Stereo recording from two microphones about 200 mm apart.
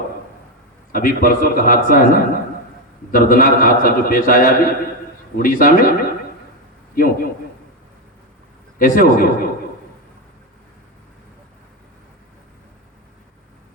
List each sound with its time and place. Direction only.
0.9 s a man's voice: 45° left (ahead or behind)
6.9 s a sound: 45° left (ahead or behind)
8.8 s a man's voice: 45° left (ahead or behind)